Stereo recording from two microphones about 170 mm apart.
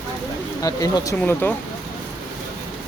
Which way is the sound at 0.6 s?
20° left (ahead or behind).